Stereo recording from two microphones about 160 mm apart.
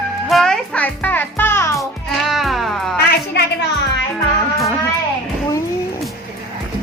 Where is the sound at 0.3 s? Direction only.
Centre (ahead or behind).